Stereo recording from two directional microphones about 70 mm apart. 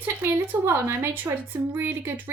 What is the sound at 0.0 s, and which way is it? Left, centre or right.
Speech, right.